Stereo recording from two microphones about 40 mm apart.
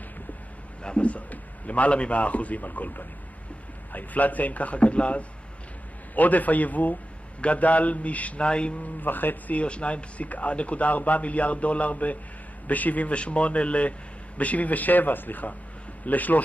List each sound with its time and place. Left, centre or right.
0.8 s a man's voice: left
6.1 s a man's voice: left
8.8 s speech: left
9.6 s a man's voice: left
13.1 s a man's voice: left